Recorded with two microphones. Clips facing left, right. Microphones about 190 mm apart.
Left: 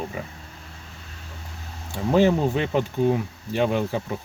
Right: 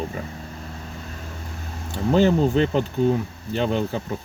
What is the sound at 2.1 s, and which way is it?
Speech, 10° left (ahead or behind).